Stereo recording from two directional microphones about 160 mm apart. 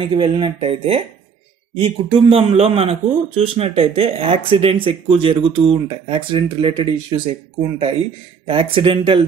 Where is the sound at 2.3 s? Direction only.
40° right (ahead or behind).